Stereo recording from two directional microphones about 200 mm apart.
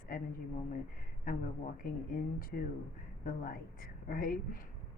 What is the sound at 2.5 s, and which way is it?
Speech, 45° left (ahead or behind).